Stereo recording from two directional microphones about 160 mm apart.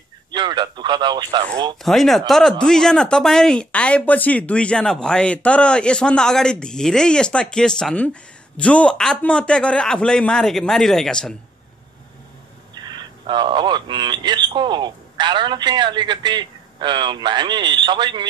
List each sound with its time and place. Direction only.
0.3 s speech: 30° right (ahead or behind)
1.8 s speech: centre (ahead or behind)
12.7 s speech: 25° right (ahead or behind)